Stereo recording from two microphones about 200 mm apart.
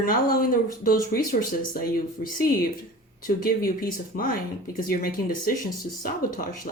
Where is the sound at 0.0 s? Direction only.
45° left (ahead or behind).